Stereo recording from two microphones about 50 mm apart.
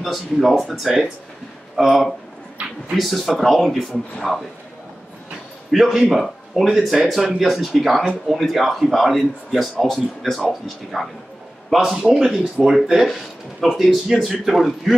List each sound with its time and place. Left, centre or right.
0.0 s speech: centre
2.6 s a sound: right
3.0 s speech: centre
5.7 s speech: centre
10.9 s speech: centre